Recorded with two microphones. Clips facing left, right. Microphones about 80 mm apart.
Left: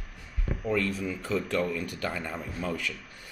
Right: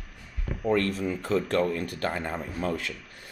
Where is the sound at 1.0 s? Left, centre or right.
Right.